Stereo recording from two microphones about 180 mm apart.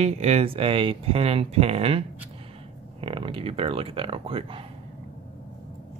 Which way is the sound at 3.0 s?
30° right (ahead or behind).